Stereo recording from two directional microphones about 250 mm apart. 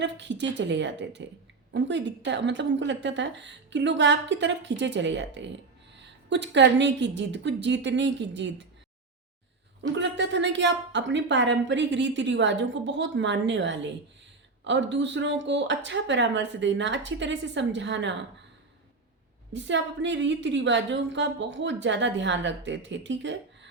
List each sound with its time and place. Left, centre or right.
0.0 s a woman's voice: right
10.0 s a woman's voice: right
19.5 s a woman's voice: right